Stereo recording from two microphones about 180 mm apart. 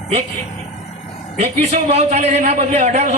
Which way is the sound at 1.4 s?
35° right (ahead or behind).